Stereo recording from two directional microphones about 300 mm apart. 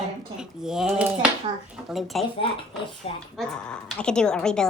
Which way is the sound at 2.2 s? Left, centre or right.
Centre.